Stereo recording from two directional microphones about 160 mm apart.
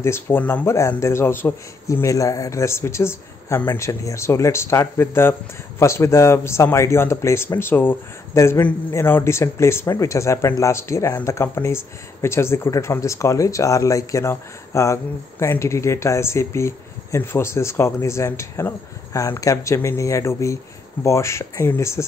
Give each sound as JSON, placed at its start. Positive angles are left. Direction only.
{"t": 0.0, "sound": "a man's voice", "side_deg": 15}